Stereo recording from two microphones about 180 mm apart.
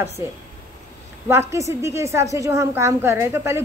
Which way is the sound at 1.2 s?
15° right (ahead or behind).